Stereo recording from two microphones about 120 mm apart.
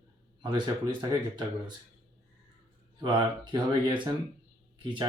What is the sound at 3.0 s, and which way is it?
Speech, 40° right (ahead or behind).